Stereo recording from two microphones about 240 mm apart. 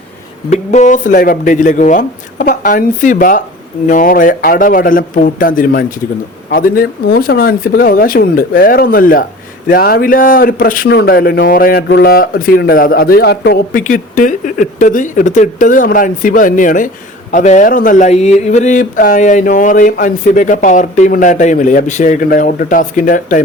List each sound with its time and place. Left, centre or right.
0.5 s a man's voice: left